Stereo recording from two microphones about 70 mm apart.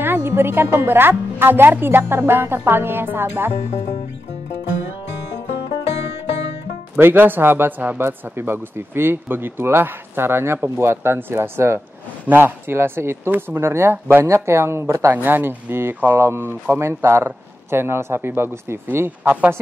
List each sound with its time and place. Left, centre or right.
0.0 s speech: right
7.0 s speech: right
15.1 s speech: right